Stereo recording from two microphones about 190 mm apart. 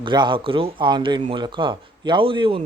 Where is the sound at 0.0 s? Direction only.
25° right (ahead or behind).